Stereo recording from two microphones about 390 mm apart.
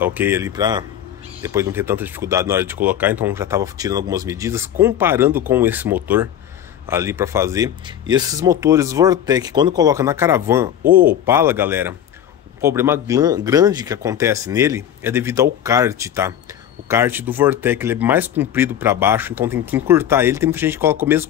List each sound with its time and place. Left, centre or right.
0.0 s speech: centre
10.8 s speech: right
11.1 s speech: centre